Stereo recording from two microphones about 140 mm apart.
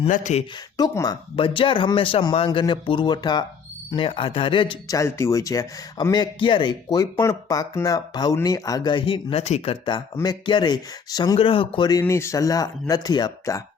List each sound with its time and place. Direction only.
0.1 s speech: 60° left (ahead or behind)
0.8 s speech: 30° left (ahead or behind)
4.9 s speech: 20° left (ahead or behind)
11.3 s speech: 40° left (ahead or behind)
11.9 s speech: 20° left (ahead or behind)